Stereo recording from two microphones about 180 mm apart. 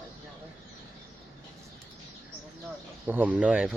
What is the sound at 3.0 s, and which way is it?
Speech, 10° right (ahead or behind).